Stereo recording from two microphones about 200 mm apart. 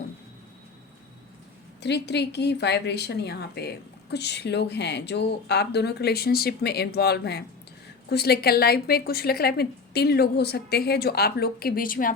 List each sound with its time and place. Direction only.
1.8 s a woman's voice: 55° left (ahead or behind)